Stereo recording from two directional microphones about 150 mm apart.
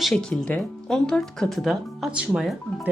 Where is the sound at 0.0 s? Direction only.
5° left (ahead or behind).